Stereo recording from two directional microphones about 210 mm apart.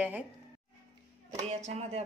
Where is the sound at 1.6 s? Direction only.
30° right (ahead or behind).